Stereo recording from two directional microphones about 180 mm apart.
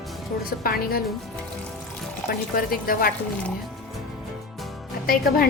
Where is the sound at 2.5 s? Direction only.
50° left (ahead or behind).